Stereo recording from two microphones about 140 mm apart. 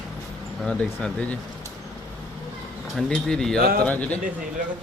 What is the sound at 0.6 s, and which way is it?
Speech, 5° left (ahead or behind).